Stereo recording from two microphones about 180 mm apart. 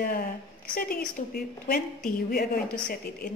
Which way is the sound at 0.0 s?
55° left (ahead or behind).